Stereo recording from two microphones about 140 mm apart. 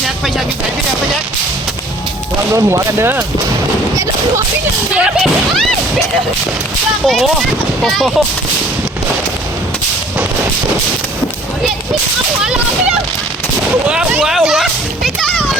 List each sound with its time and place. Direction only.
2.6 s speech: 20° right (ahead or behind)
4.9 s speech: 10° right (ahead or behind)
7.0 s speech: centre (ahead or behind)
12.4 s speech: 5° right (ahead or behind)
13.8 s children playing: 5° right (ahead or behind)